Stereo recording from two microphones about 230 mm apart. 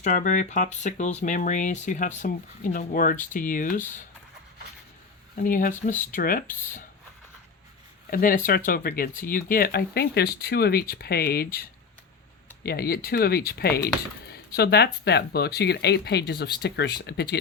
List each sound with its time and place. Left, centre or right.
0.0 s speech: left
5.4 s speech: left
8.1 s speech: left
12.6 s speech: left